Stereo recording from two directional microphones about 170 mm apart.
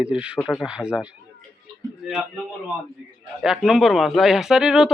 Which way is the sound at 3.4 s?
5° right (ahead or behind).